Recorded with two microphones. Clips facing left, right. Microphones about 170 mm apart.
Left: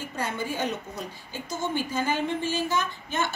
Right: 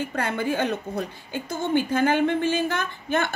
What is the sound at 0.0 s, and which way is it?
A woman's voice, 60° right (ahead or behind).